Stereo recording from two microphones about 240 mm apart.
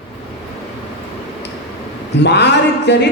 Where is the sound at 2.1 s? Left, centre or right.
Left.